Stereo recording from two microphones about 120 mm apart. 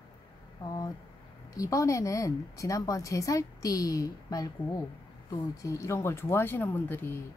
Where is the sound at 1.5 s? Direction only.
25° left (ahead or behind).